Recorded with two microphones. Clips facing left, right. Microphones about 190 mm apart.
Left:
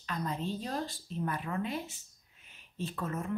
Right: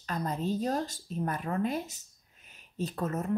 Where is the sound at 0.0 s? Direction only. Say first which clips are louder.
Right 3 dB; 40° right (ahead or behind).